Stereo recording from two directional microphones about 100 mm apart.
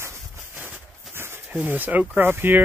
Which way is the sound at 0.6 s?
20° right (ahead or behind).